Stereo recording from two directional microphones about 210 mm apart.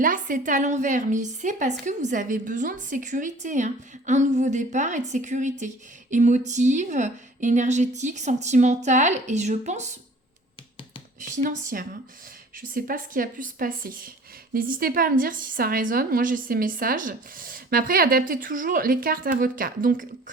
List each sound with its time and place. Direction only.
0.0 s a woman's voice: 40° right (ahead or behind)
11.3 s a woman's voice: 40° right (ahead or behind)